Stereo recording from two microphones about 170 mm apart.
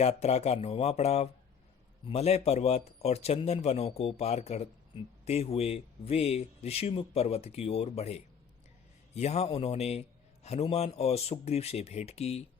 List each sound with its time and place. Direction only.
0.0 s a man's voice: 40° left (ahead or behind)